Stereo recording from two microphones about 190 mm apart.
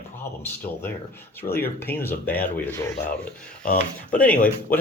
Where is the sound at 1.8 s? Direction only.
10° left (ahead or behind).